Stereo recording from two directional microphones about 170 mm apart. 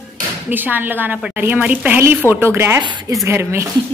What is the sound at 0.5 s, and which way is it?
A woman's voice, 10° right (ahead or behind).